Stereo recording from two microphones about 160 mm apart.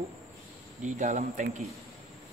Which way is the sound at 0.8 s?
50° right (ahead or behind).